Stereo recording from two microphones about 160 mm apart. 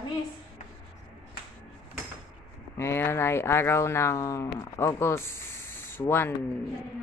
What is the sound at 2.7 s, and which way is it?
Speech, 15° left (ahead or behind).